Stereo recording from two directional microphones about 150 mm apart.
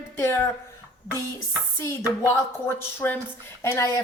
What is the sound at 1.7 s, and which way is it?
Speech, 20° left (ahead or behind).